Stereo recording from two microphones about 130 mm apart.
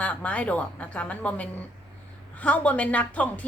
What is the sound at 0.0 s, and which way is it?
Speech, 10° left (ahead or behind).